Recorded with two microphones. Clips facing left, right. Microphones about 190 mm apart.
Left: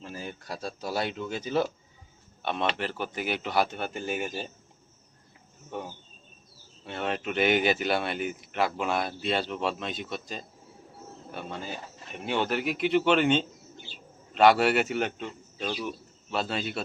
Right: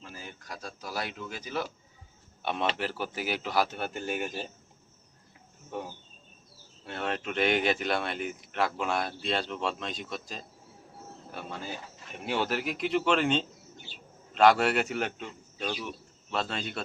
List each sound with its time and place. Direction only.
0.1 s speech: 30° left (ahead or behind)
2.4 s speech: 10° right (ahead or behind)
6.8 s speech: centre (ahead or behind)